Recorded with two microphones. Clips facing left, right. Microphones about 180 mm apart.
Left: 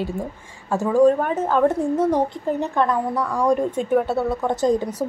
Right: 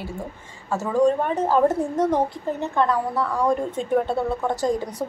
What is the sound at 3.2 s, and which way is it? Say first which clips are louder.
Speech: left 1 dB; 5° right (ahead or behind).